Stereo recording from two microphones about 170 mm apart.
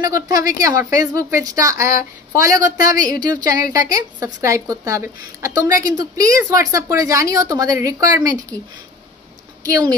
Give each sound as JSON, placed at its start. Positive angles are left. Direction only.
{"t": 0.0, "sound": "a woman's voice", "side_deg": -20}
{"t": 9.7, "sound": "a woman's voice", "side_deg": -20}